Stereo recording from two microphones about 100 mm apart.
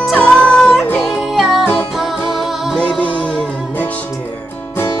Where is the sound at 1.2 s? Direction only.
Centre (ahead or behind).